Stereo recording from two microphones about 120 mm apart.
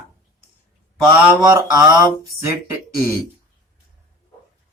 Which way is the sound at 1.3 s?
25° right (ahead or behind).